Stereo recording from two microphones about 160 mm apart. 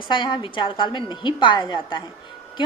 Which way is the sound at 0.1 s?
30° left (ahead or behind).